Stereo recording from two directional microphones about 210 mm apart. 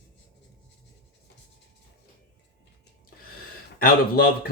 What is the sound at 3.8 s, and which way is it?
Speech, 45° left (ahead or behind).